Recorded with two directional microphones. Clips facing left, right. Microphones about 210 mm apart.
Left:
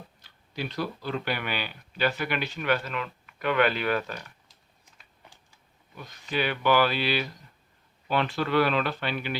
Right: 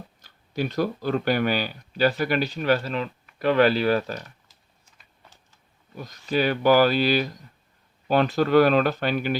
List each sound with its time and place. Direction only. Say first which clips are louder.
0.2 s speech: right 7 dB; 45° right (ahead or behind)
5.9 s speech: right 6 dB; 40° right (ahead or behind)